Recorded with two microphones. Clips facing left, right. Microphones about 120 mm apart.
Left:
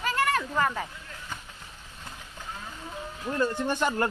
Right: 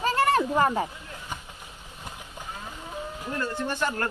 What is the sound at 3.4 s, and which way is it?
Speech, 15° left (ahead or behind).